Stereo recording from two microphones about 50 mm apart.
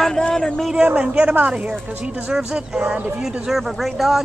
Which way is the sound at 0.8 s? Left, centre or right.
Right.